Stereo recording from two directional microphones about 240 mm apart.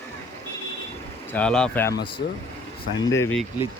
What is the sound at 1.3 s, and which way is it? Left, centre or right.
Speech, centre.